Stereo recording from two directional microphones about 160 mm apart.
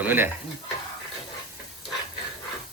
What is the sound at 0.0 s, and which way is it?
Speech, 10° right (ahead or behind).